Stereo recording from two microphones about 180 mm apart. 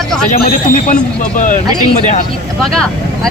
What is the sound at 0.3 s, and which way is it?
A man's voice, 50° left (ahead or behind).